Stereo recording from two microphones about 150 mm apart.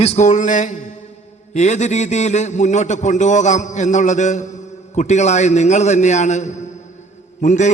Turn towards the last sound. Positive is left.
turn(degrees=50)  # may be behind; listen again after turning